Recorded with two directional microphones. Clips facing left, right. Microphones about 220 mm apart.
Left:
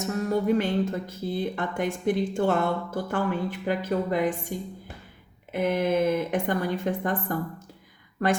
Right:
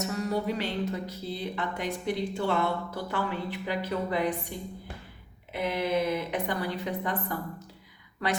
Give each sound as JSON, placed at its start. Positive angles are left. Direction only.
{"t": 0.0, "sound": "speech", "side_deg": 50}